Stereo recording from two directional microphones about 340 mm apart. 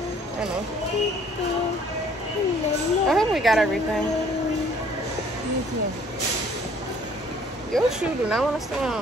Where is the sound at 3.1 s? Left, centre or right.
Centre.